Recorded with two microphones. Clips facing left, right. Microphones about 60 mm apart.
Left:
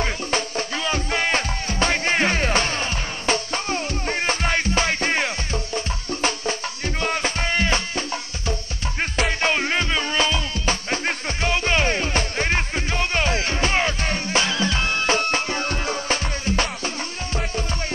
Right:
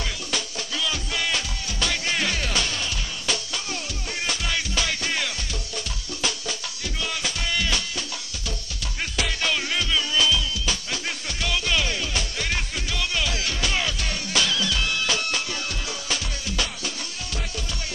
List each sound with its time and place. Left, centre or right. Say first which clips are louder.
0.0 s music: left 6 dB; left
9.1 s music: left 4 dB; left